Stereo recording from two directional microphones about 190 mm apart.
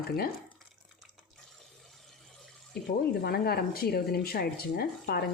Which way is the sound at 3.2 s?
55° left (ahead or behind).